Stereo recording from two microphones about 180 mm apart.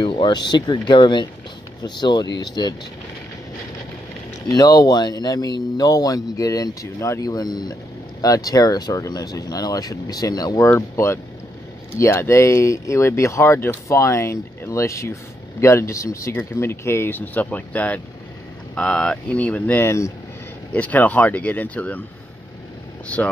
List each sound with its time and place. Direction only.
0.0 s speech: 25° left (ahead or behind)
4.5 s speech: 20° left (ahead or behind)
23.1 s speech: 5° left (ahead or behind)